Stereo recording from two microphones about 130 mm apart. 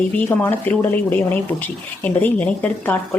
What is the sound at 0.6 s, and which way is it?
Speech, 15° left (ahead or behind).